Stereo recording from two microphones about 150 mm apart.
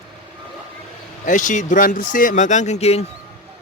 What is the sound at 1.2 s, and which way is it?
Speech, 55° left (ahead or behind).